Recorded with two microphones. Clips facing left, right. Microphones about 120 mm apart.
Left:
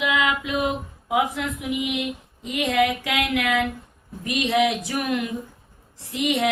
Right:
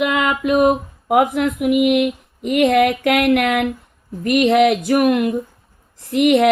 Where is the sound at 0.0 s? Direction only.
50° right (ahead or behind).